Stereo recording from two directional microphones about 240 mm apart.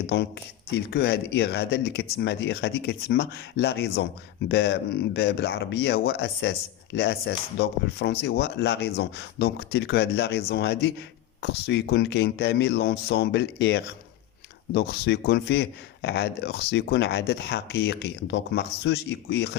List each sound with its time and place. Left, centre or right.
0.7 s speech: left